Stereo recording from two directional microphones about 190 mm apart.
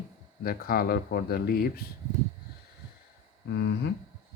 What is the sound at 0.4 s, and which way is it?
Speech, 50° left (ahead or behind).